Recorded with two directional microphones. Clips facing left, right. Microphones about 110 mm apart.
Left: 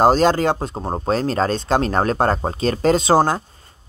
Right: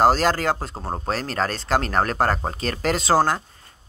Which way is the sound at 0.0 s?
20° left (ahead or behind).